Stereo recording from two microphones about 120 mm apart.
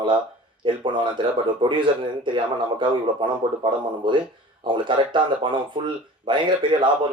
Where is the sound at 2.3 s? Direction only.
45° right (ahead or behind).